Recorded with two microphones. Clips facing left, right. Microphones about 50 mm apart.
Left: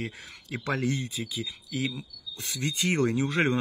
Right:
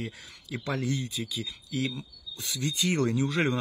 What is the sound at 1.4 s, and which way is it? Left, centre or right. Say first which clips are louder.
Speech: even; centre.